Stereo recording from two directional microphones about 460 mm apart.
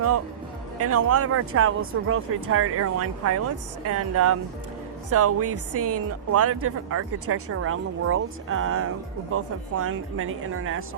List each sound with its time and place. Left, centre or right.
0.8 s speech: right